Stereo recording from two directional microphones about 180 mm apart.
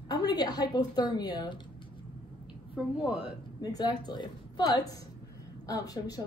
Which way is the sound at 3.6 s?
20° left (ahead or behind).